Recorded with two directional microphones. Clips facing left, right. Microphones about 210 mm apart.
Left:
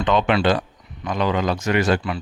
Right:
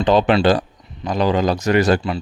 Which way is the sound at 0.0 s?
35° right (ahead or behind).